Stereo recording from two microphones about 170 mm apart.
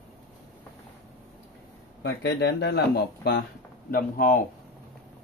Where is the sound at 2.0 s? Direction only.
85° left.